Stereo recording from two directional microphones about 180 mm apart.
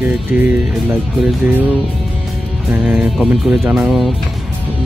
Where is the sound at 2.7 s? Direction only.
5° right (ahead or behind).